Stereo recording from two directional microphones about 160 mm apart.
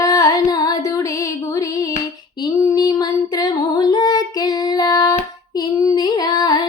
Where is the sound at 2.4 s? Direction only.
25° left (ahead or behind).